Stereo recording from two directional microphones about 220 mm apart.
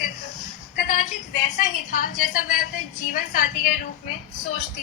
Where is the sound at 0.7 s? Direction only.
40° left (ahead or behind).